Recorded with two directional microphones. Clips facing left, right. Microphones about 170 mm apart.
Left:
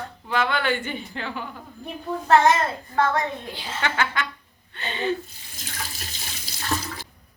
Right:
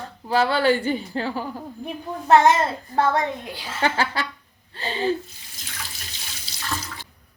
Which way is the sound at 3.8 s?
35° right (ahead or behind).